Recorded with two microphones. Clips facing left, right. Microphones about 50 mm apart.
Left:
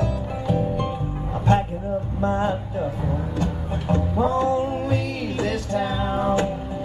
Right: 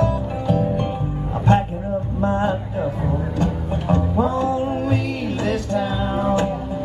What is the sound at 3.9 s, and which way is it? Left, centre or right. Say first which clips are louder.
Music: right 2 dB; right.